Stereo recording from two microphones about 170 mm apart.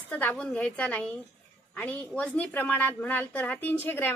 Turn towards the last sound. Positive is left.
turn(degrees=10)  # may be behind; listen again after turning